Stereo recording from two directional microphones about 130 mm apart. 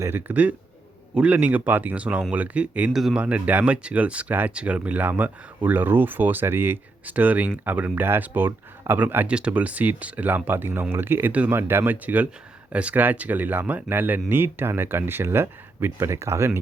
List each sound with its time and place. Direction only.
0.0 s speech: 15° right (ahead or behind)